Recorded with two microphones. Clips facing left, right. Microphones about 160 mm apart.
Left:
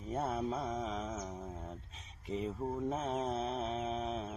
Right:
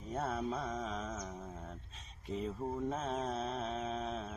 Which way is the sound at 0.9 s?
5° left (ahead or behind).